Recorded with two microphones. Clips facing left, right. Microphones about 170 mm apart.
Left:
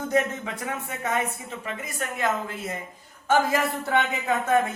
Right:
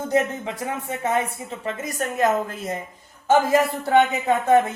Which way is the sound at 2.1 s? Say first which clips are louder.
Right 6 dB; 40° right (ahead or behind).